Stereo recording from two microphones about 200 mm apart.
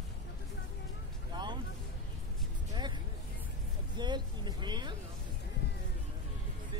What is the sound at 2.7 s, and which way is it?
Music, 20° right (ahead or behind).